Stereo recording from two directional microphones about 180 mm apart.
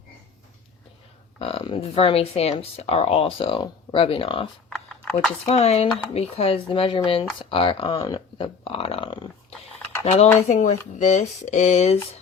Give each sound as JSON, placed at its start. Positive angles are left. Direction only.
{"t": 1.4, "sound": "speech", "side_deg": 30}
{"t": 4.7, "sound": "a sound", "side_deg": 0}
{"t": 5.5, "sound": "speech", "side_deg": 35}